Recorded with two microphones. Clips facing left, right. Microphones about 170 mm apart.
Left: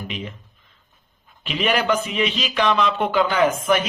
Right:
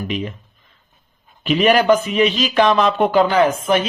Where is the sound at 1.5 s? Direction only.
45° right (ahead or behind).